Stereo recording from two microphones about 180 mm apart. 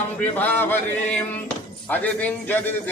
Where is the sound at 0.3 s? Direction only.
10° left (ahead or behind).